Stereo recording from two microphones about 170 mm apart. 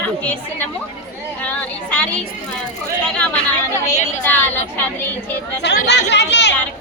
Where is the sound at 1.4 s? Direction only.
10° left (ahead or behind).